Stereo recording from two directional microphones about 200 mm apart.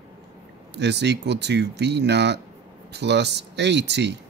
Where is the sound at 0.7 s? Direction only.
60° right (ahead or behind).